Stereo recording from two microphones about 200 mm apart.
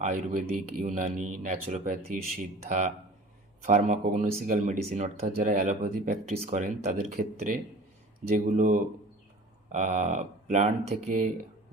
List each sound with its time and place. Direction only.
0.0 s speech: 40° right (ahead or behind)